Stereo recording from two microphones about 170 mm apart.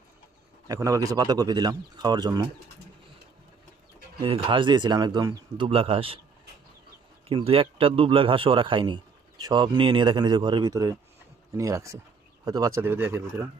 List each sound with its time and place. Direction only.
0.7 s speech: 20° right (ahead or behind)
4.2 s speech: 30° right (ahead or behind)
7.3 s a man's voice: 35° right (ahead or behind); by 13.5 s 15° right (ahead or behind)